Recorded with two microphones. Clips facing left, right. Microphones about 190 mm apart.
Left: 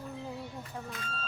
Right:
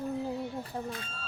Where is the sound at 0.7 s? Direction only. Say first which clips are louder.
Right 5 dB; 30° right (ahead or behind).